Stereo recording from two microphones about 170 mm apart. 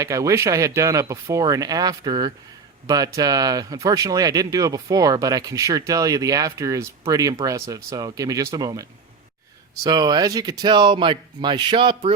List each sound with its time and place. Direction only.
0.0 s speech: 20° right (ahead or behind)